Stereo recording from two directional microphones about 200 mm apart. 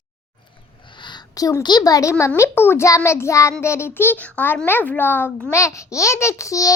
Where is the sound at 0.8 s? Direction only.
25° left (ahead or behind).